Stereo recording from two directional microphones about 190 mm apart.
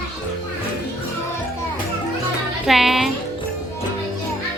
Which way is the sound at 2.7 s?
Centre (ahead or behind).